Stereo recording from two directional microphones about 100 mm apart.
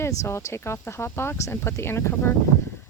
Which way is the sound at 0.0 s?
30° left (ahead or behind).